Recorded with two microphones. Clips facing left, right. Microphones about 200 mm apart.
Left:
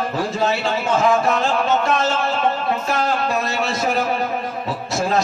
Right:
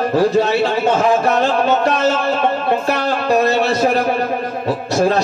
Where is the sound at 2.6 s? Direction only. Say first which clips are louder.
Right 4 dB; 65° right (ahead or behind).